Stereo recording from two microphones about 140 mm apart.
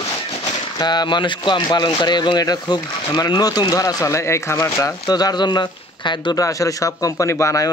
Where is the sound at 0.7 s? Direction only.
30° left (ahead or behind).